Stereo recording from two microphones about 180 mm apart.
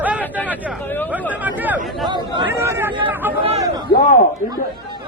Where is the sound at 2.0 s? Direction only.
25° right (ahead or behind).